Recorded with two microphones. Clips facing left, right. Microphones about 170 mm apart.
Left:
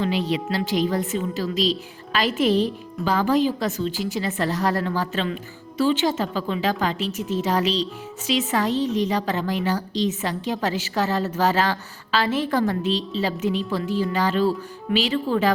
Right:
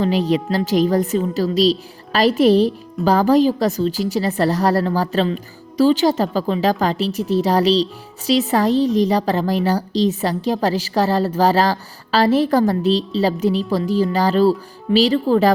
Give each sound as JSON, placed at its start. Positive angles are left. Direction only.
{"t": 0.0, "sound": "a woman's voice", "side_deg": -40}